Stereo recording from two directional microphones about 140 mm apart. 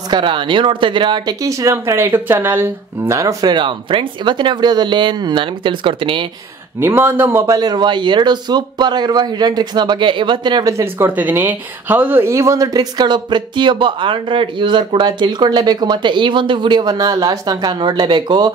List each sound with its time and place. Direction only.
0.1 s speech: 35° right (ahead or behind)
6.8 s speech: 15° right (ahead or behind)
7.5 s speech: 30° right (ahead or behind)